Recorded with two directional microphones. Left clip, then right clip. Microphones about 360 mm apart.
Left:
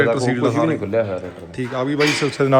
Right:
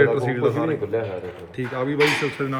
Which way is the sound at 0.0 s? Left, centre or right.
Centre.